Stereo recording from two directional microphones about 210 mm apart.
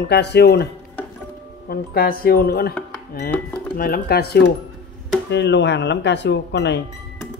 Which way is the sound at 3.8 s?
45° left (ahead or behind).